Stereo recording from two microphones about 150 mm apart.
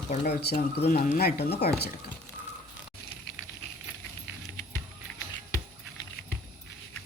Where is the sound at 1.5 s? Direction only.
90° left.